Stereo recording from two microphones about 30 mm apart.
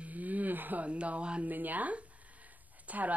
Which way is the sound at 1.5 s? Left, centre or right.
Right.